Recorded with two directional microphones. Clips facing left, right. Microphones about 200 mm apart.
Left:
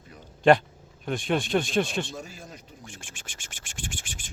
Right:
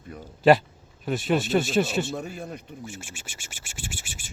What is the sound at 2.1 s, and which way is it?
Speech, 60° right (ahead or behind).